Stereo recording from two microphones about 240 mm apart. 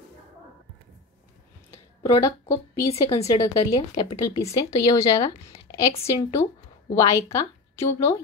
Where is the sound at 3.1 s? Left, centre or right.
Centre.